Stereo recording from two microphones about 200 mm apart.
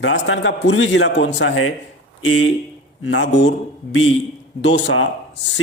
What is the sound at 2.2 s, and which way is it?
Speech, 80° left.